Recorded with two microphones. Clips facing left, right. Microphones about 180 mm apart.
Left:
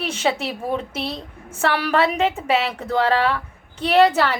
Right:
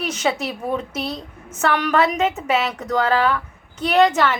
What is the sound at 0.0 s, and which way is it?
A woman's voice, 30° left (ahead or behind).